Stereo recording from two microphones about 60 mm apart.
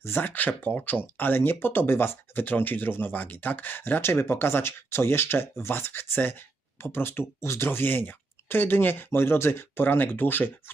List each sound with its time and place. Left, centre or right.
0.0 s speech: left